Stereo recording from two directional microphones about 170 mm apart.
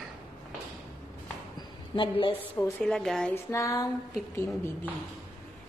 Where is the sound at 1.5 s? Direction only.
30° left (ahead or behind).